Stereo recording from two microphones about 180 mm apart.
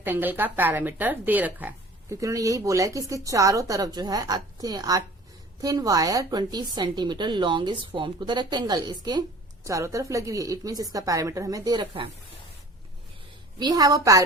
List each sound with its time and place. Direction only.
0.0 s a woman's voice: 10° right (ahead or behind)
13.6 s a woman's voice: 20° right (ahead or behind)